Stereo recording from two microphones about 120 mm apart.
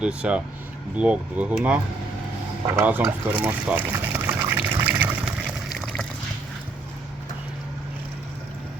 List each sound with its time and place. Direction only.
0.0 s speech: 10° right (ahead or behind)
3.3 s liquid: 10° right (ahead or behind)
4.8 s water: 15° right (ahead or behind)
5.7 s a sound: 5° left (ahead or behind)